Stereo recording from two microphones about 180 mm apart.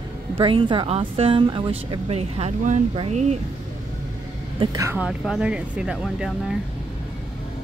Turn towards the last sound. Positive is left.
turn(degrees=0)  # may be behind; listen again after turning